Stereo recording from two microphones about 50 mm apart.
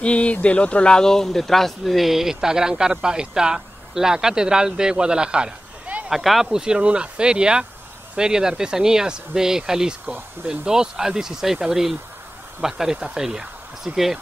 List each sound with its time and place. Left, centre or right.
0.0 s speech: left; by 5.5 s centre
6.0 s speech: centre